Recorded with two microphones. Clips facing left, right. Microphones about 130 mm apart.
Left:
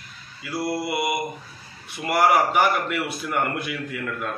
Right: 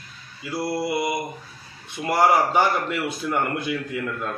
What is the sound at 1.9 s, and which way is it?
A man's voice, 25° right (ahead or behind).